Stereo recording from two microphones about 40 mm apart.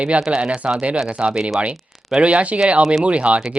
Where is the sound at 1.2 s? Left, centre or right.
Right.